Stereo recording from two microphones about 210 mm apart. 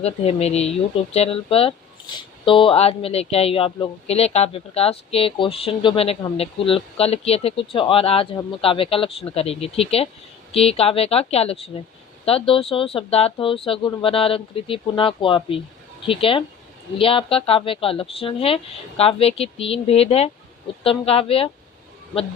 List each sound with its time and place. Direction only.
0.0 s speech: 30° left (ahead or behind)